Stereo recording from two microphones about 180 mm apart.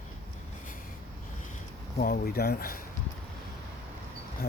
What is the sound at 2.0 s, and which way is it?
Speech, 55° left (ahead or behind).